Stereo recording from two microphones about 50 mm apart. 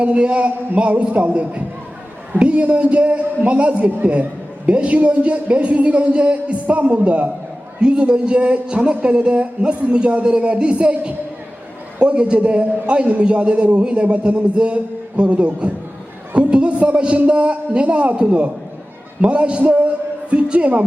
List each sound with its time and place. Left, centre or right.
0.0 s a man's voice: right